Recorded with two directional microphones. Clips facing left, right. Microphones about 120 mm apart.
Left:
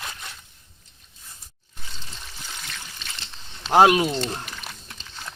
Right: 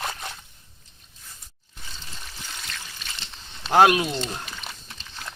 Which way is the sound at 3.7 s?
15° left (ahead or behind).